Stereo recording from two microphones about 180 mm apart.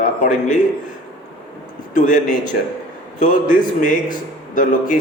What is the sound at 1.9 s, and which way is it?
A man's voice, 45° left (ahead or behind).